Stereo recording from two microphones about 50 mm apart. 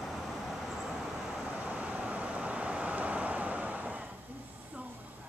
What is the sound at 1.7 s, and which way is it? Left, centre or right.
Vehicle, right.